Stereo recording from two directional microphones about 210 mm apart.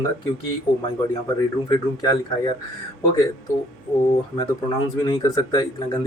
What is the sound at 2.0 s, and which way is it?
Speech, 20° left (ahead or behind).